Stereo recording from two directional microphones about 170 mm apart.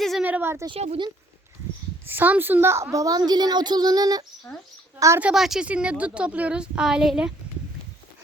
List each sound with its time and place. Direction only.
0.0 s a sound: centre (ahead or behind)
0.3 s speech: 10° right (ahead or behind)
0.7 s speech: 35° right (ahead or behind)
2.0 s a woman's voice: 10° right (ahead or behind)
5.2 s speech: centre (ahead or behind)